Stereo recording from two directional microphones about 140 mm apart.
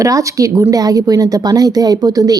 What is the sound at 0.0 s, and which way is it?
A woman's voice, 25° right (ahead or behind).